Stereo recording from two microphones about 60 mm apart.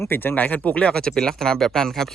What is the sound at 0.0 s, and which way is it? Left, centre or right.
Speech, left.